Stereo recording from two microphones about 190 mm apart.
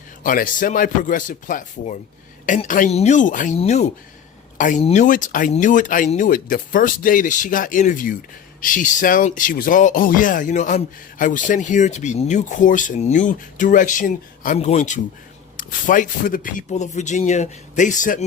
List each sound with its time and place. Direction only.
0.2 s a man's voice: 45° left (ahead or behind)
5.0 s a man's voice: 45° left (ahead or behind)